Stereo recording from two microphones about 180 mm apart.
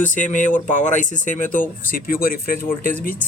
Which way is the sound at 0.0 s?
45° left (ahead or behind).